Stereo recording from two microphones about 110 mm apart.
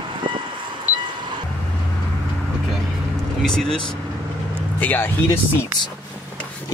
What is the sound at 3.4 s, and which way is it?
Speech, 5° left (ahead or behind).